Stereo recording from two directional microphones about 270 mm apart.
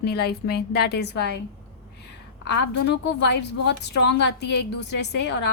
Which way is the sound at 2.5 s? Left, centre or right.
Left.